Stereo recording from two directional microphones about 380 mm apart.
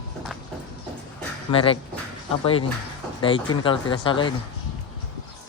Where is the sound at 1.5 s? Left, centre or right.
Centre.